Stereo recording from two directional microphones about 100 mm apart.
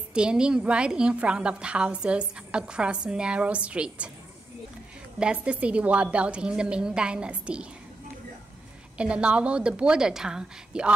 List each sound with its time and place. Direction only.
0.1 s a woman's voice: 10° right (ahead or behind)
5.2 s a woman's voice: 10° right (ahead or behind)
8.9 s a woman's voice: 10° right (ahead or behind)